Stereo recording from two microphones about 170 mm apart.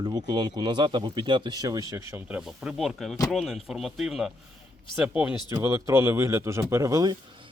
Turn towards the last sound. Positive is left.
turn(degrees=-20)  # may be behind; listen again after turning